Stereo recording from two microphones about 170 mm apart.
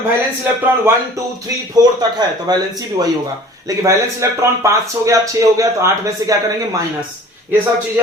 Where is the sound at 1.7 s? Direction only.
25° right (ahead or behind).